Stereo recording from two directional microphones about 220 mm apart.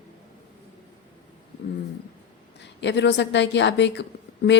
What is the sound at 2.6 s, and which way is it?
A woman's voice, 55° left (ahead or behind).